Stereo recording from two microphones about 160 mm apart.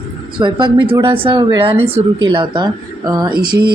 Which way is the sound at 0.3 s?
30° right (ahead or behind).